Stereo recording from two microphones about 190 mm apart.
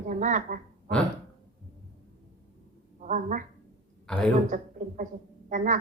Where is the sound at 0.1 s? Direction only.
40° right (ahead or behind).